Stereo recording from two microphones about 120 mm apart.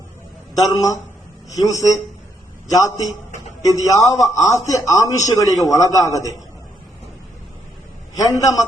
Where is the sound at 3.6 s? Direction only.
30° left (ahead or behind).